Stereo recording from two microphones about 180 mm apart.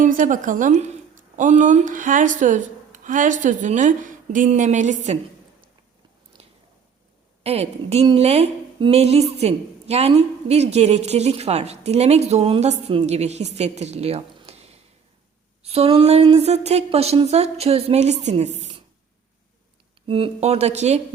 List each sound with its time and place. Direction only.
0.0 s a woman's voice: 45° right (ahead or behind)
6.3 s squish: 25° right (ahead or behind)
7.4 s a woman's voice: 35° right (ahead or behind)
20.1 s a woman's voice: 30° right (ahead or behind)